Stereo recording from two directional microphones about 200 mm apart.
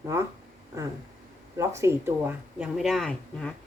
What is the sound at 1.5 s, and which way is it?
Speech, 15° right (ahead or behind).